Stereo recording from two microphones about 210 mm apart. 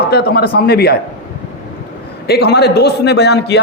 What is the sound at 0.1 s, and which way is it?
Speech, 50° left (ahead or behind).